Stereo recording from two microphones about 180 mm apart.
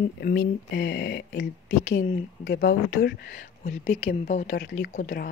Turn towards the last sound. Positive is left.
turn(degrees=55)  # may be behind; listen again after turning